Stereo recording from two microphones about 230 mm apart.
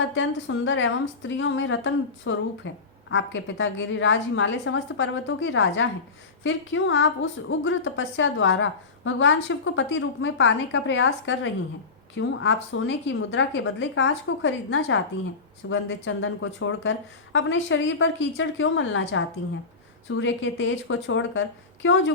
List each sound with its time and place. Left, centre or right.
0.1 s a woman's voice: left